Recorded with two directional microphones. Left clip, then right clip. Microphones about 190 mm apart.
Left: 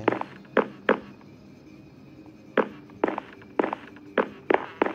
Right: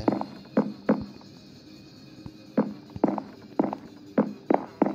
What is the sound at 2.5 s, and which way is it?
Walk, 15° right (ahead or behind).